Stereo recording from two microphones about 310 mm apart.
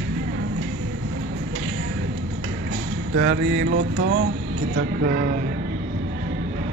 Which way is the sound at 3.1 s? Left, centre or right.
Right.